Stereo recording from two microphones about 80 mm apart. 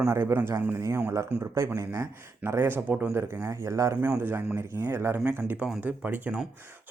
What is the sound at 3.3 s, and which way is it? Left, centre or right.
Speech, right.